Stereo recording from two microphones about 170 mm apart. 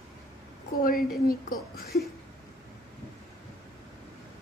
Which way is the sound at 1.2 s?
60° left (ahead or behind).